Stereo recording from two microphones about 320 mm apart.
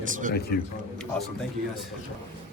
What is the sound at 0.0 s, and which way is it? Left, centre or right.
Speech, right.